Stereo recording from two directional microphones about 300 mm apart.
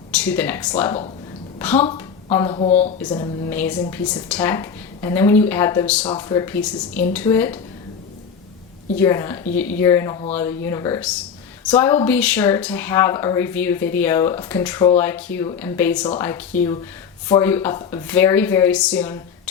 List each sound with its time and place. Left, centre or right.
0.1 s a woman's voice: centre; by 2.9 s left
3.1 s speech: centre
9.0 s speech: centre